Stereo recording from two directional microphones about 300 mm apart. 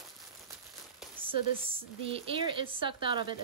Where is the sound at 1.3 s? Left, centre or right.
Centre.